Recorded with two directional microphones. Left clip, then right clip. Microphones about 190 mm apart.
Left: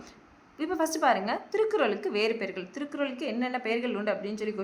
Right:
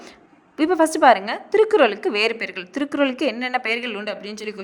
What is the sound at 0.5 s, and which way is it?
A woman's voice, 45° right (ahead or behind).